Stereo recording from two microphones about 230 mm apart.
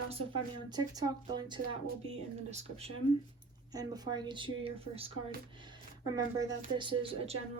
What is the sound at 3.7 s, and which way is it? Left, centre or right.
A woman's voice, centre.